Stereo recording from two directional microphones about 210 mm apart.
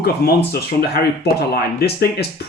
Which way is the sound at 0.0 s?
50° left (ahead or behind).